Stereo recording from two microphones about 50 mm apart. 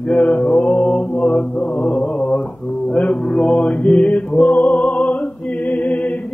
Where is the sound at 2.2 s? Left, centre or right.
Centre.